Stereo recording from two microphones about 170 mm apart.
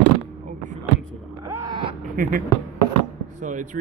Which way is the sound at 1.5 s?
20° right (ahead or behind).